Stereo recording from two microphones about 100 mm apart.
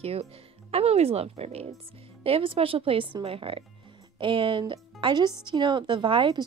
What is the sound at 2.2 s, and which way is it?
Speech, 65° right (ahead or behind).